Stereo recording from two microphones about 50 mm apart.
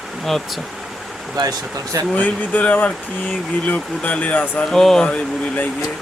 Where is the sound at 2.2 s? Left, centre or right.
Left.